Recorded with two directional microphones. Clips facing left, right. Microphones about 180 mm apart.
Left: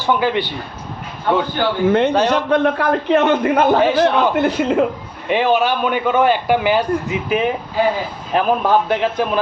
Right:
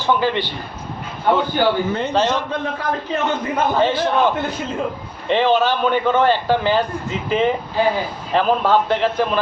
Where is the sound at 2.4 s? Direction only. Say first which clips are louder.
Left 8 dB; 65° left (ahead or behind).